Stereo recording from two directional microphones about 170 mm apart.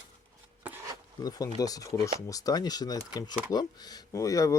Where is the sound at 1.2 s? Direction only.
20° left (ahead or behind).